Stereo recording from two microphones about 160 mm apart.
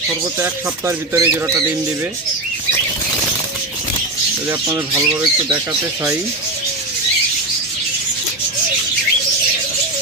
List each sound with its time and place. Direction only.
0.3 s speech: 15° right (ahead or behind)
4.4 s speech: 15° right (ahead or behind)